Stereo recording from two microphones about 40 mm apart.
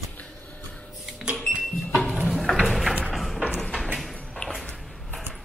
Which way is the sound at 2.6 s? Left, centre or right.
Centre.